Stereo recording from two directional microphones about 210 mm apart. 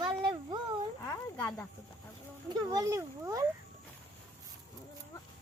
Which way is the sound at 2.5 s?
15° right (ahead or behind).